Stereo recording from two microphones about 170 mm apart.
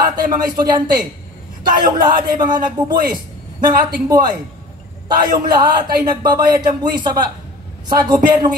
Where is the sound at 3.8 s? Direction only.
25° right (ahead or behind).